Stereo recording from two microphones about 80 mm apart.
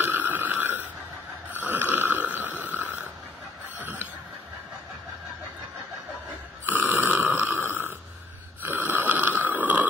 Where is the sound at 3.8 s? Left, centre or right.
Right.